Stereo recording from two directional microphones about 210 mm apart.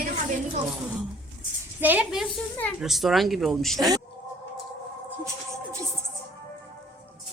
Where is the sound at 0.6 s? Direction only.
Centre (ahead or behind).